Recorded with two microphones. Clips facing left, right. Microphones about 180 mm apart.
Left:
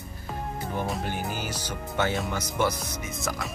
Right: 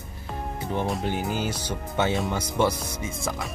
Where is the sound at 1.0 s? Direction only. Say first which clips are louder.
Right 4 dB; 20° right (ahead or behind).